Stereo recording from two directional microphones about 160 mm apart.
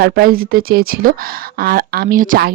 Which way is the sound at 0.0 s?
70° right (ahead or behind).